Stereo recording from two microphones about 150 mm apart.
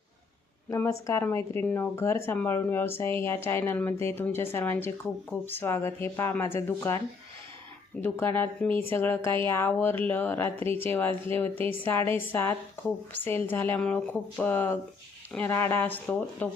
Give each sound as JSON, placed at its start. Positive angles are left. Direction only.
{"t": 0.7, "sound": "speech", "side_deg": 20}
{"t": 8.0, "sound": "speech", "side_deg": 15}